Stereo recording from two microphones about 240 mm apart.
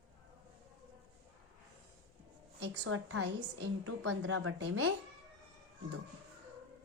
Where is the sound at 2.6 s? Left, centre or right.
Right.